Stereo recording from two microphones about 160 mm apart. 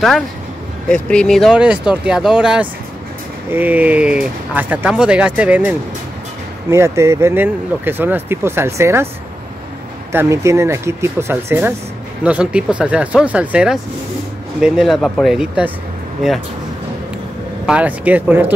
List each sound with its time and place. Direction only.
0.8 s speech: 5° left (ahead or behind); by 9.1 s 15° right (ahead or behind)
10.1 s speech: 20° right (ahead or behind)
17.6 s speech: 10° right (ahead or behind)